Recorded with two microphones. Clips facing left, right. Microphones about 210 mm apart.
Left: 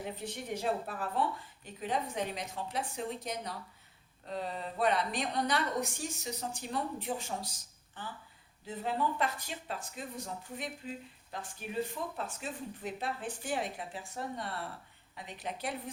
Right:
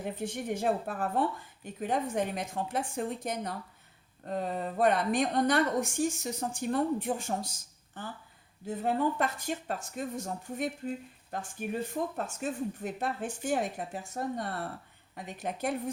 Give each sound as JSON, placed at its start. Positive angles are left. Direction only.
{"t": 0.0, "sound": "a woman's voice", "side_deg": -50}
{"t": 8.6, "sound": "a woman's voice", "side_deg": -45}